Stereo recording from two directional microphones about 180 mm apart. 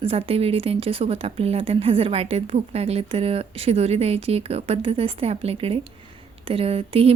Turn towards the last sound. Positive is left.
turn(degrees=-35)  # may be behind; listen again after turning